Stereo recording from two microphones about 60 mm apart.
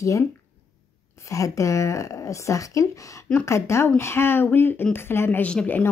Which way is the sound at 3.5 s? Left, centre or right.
Left.